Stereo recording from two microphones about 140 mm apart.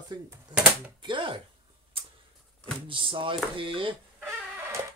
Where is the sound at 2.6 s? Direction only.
40° right (ahead or behind).